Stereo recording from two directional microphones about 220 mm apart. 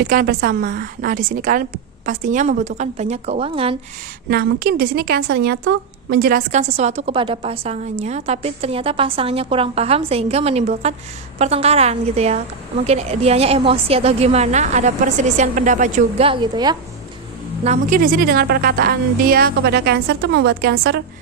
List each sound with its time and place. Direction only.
0.0 s a woman's voice: 40° right (ahead or behind)
4.6 s a woman's voice: 45° right (ahead or behind); by 16.7 s 20° right (ahead or behind)
17.6 s a woman's voice: 35° right (ahead or behind)